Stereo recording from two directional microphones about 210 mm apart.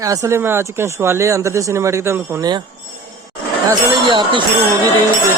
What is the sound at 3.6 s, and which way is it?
Speech, 25° right (ahead or behind).